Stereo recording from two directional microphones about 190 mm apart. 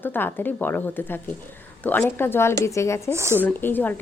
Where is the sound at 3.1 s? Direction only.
15° right (ahead or behind).